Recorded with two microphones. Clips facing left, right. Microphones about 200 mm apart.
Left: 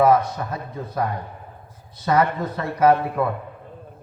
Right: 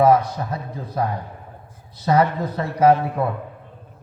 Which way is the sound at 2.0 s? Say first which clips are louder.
Right 1 dB; 30° right (ahead or behind).